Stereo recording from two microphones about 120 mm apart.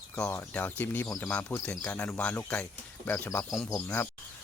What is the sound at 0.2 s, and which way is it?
Speech, 10° left (ahead or behind).